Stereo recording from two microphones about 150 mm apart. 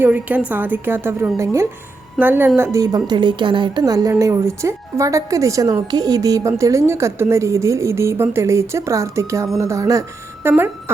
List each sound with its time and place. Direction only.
0.0 s a woman's voice: 10° right (ahead or behind)